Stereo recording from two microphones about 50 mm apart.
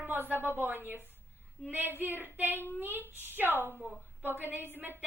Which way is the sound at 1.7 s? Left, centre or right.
Right.